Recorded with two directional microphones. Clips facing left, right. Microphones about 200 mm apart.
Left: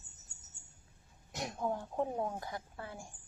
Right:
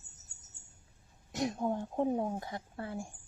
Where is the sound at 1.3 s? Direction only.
20° right (ahead or behind).